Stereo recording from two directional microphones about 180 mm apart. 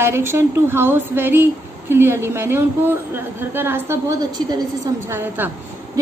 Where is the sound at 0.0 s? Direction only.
15° right (ahead or behind).